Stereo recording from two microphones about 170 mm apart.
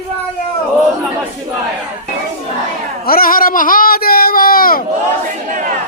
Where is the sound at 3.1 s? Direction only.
60° left (ahead or behind).